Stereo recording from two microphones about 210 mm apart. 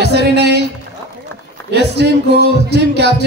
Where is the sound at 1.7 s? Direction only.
55° right (ahead or behind).